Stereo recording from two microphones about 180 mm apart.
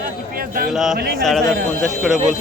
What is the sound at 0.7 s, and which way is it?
Speech, centre (ahead or behind).